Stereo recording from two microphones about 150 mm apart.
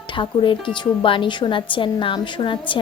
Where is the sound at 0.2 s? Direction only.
35° left (ahead or behind).